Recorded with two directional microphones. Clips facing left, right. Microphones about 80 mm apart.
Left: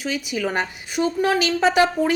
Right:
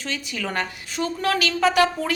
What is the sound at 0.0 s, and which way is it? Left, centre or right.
A woman's voice, centre.